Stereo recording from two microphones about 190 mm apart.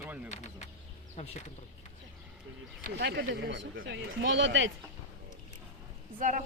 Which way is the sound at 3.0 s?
55° right (ahead or behind).